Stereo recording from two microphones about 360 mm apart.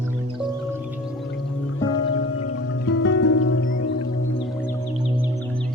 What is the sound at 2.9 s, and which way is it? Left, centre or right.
Music, left.